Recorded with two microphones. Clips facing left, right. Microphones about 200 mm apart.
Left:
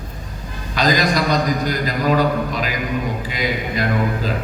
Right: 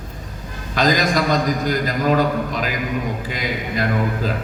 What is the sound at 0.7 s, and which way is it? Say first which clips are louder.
A man's voice: even; 45° right (ahead or behind).